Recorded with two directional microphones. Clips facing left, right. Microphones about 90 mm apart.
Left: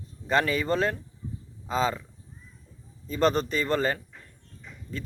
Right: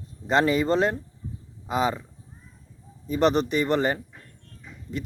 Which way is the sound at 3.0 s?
15° right (ahead or behind).